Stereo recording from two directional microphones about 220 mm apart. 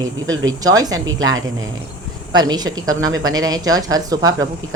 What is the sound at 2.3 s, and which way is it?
Speech, 20° right (ahead or behind).